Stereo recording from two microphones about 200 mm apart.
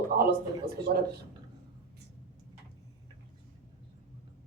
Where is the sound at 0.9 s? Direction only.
45° right (ahead or behind).